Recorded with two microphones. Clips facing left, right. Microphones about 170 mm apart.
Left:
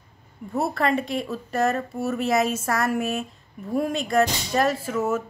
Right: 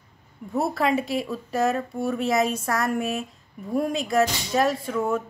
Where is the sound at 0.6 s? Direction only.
Centre (ahead or behind).